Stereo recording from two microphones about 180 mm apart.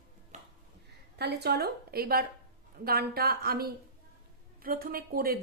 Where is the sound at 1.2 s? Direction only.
65° right (ahead or behind).